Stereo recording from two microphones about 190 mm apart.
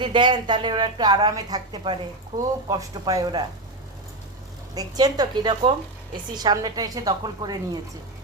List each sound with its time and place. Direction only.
0.0 s a woman's voice: 25° right (ahead or behind)
4.7 s a woman's voice: 20° right (ahead or behind)